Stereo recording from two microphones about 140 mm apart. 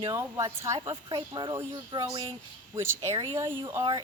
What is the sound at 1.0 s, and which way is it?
Speech, 35° right (ahead or behind).